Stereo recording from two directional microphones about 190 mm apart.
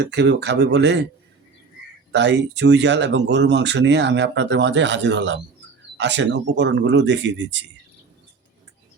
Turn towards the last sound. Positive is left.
turn(degrees=-70)  # may be behind; listen again after turning